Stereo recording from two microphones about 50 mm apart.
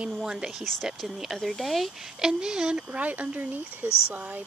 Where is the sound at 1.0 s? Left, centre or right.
Centre.